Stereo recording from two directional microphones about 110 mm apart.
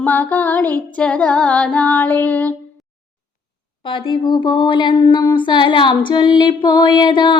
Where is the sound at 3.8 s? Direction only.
55° left (ahead or behind).